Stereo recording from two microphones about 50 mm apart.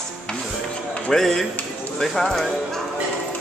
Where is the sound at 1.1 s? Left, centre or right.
Centre.